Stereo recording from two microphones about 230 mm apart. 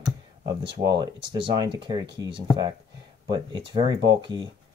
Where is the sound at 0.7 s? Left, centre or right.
Centre.